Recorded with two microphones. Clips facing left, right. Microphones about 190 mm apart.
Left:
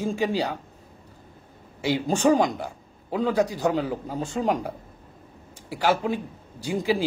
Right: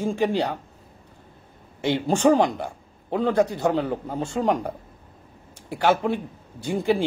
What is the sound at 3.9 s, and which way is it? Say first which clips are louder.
Speech: right 2 dB; 60° right (ahead or behind).